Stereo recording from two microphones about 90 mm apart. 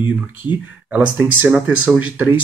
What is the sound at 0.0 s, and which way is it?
Speech, 20° right (ahead or behind).